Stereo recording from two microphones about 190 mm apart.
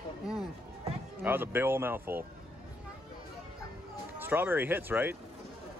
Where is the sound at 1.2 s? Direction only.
10° right (ahead or behind).